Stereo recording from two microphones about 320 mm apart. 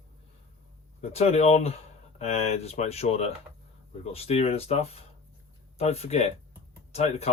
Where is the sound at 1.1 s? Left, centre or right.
Centre.